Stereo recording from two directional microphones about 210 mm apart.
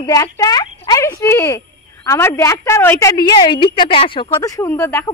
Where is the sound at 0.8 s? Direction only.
15° left (ahead or behind).